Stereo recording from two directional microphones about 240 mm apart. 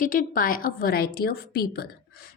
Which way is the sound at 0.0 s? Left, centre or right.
Left.